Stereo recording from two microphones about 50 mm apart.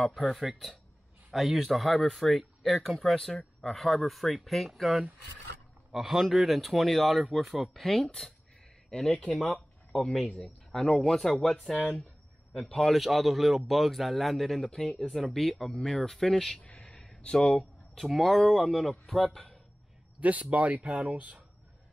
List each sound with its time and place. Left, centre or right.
0.0 s speech: centre
9.4 s a sound: centre
10.2 s a man's voice: left
10.7 s a man's voice: centre
14.6 s speech: centre
15.0 s speech: centre
16.6 s a sound: left
17.0 s speech: centre
17.9 s speech: centre
19.3 s a sound: centre
20.2 s speech: right